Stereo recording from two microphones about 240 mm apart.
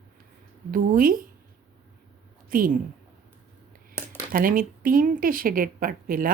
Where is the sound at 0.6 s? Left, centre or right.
Right.